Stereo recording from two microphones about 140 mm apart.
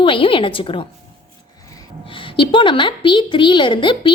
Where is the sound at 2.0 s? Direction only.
35° left (ahead or behind).